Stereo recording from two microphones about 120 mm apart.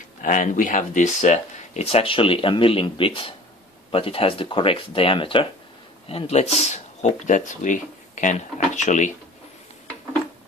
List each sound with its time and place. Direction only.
0.2 s speech: 90° left